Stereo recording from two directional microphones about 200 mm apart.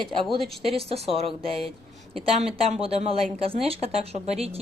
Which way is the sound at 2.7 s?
30° right (ahead or behind).